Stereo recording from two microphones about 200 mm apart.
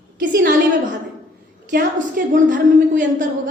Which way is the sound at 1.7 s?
40° right (ahead or behind).